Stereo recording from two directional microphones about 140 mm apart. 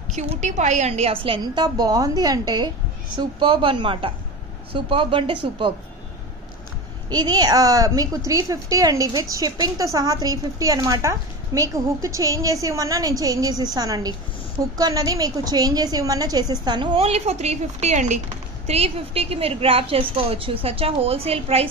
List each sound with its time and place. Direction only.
0.1 s a woman's voice: 55° right (ahead or behind); by 5.7 s 40° right (ahead or behind)
7.1 s a woman's voice: 30° right (ahead or behind); by 21.6 s 45° right (ahead or behind)